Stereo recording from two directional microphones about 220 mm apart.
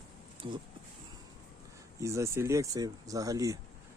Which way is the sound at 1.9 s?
15° right (ahead or behind).